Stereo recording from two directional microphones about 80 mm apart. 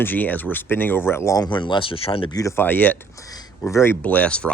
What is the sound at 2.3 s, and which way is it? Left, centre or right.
Speech, left.